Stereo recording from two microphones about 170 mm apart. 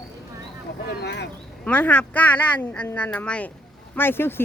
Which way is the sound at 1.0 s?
90° left.